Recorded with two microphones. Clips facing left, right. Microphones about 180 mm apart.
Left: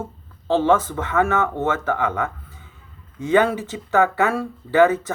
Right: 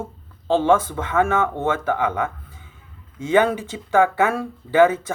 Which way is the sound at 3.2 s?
15° right (ahead or behind).